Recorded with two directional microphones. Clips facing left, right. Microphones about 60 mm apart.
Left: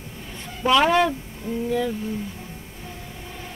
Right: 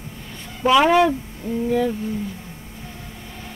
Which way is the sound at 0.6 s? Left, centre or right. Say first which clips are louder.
Right 3 dB; centre.